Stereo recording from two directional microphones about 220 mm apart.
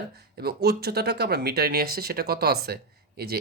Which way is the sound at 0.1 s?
45° right (ahead or behind).